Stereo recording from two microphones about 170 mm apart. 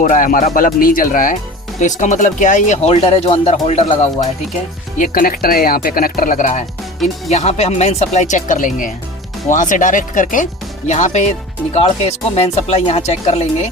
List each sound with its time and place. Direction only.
0.0 s speech: 50° left (ahead or behind)
4.9 s speech: 50° left (ahead or behind)